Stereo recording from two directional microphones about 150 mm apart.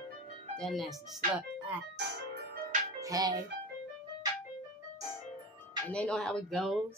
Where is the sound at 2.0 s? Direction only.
90° right.